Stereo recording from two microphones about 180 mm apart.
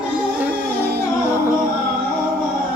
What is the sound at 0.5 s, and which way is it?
Music, 60° right (ahead or behind).